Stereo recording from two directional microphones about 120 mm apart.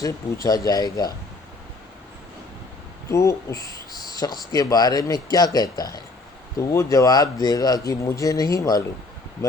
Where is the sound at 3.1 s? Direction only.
25° left (ahead or behind).